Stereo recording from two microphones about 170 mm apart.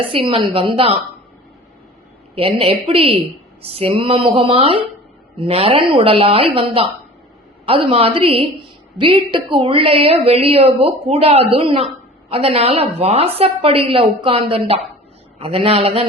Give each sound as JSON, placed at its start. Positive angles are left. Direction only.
{"t": 0.0, "sound": "a woman's voice", "side_deg": -30}
{"t": 2.3, "sound": "a woman's voice", "side_deg": -35}